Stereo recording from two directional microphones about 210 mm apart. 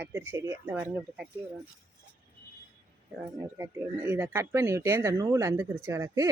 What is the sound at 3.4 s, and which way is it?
Speech, 10° right (ahead or behind).